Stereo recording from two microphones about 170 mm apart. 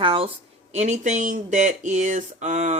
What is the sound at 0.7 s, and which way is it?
Speech, 45° right (ahead or behind).